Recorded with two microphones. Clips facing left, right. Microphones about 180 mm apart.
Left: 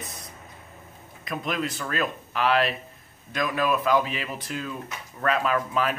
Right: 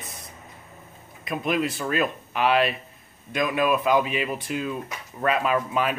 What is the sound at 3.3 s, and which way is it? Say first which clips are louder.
Speech: right 2 dB; 20° right (ahead or behind).